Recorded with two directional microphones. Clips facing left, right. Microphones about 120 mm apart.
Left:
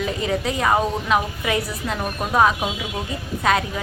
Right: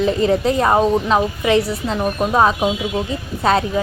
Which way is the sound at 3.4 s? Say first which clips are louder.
Right 4 dB; 30° right (ahead or behind).